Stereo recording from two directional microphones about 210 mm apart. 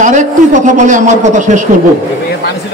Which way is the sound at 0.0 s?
35° right (ahead or behind).